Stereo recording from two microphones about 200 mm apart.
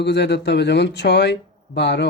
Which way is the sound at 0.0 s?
60° left (ahead or behind).